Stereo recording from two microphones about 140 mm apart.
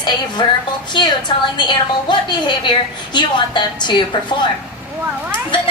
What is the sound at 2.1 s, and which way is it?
Speech, 30° left (ahead or behind).